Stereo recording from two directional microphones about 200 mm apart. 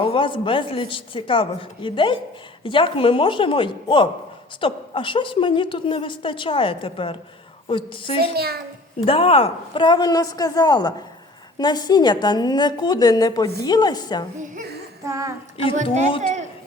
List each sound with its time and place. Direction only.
0.0 s a woman's voice: 25° left (ahead or behind)
8.2 s a child's voice: 50° right (ahead or behind)
9.0 s a woman's voice: 30° left (ahead or behind)
14.3 s speech: 40° right (ahead or behind)
15.0 s a sound: 15° right (ahead or behind)
15.7 s a woman's voice: 35° right (ahead or behind)